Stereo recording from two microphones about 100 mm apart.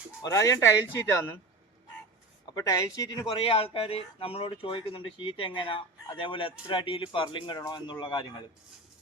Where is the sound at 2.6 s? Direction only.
35° left (ahead or behind).